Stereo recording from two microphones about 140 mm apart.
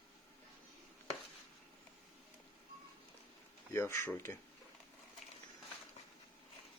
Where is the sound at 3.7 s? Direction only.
20° left (ahead or behind).